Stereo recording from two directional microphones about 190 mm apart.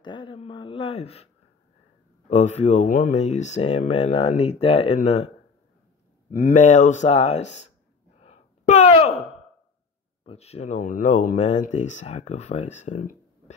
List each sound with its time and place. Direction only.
0.0 s speech: 25° left (ahead or behind)
6.3 s speech: 45° left (ahead or behind)
8.2 s a sound: 35° left (ahead or behind)
10.2 s speech: 35° left (ahead or behind)